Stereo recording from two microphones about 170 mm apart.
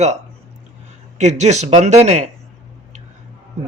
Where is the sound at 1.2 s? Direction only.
40° right (ahead or behind).